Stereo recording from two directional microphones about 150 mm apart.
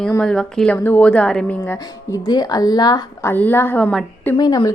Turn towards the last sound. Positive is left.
turn(degrees=25)  # may be behind; listen again after turning